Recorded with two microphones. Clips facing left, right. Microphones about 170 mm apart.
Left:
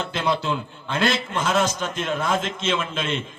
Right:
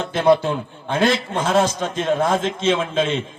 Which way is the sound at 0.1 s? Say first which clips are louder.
Right 11 dB; 55° right (ahead or behind).